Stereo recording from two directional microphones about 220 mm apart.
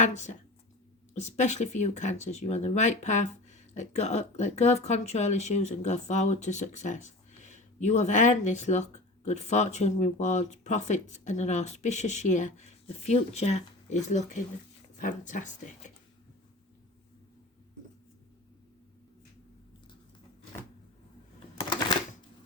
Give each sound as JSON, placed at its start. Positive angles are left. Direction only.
{"t": 0.0, "sound": "speech", "side_deg": 30}